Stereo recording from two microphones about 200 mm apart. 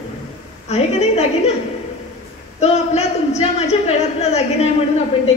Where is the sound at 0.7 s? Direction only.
30° left (ahead or behind).